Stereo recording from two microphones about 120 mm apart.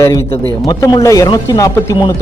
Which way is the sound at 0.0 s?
25° left (ahead or behind).